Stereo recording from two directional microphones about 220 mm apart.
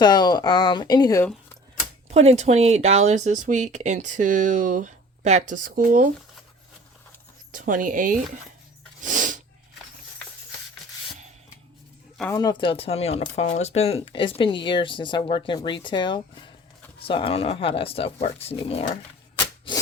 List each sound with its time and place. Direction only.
0.0 s speech: 20° left (ahead or behind)
2.0 s speech: 30° right (ahead or behind)
7.5 s speech: 35° right (ahead or behind)
9.0 s sneeze: 35° right (ahead or behind)
12.3 s speech: 20° left (ahead or behind)